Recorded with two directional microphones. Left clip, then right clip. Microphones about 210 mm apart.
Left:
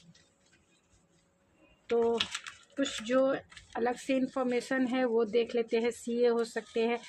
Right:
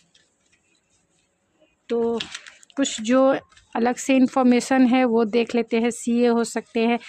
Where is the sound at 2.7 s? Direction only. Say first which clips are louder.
Right 9 dB; 45° right (ahead or behind).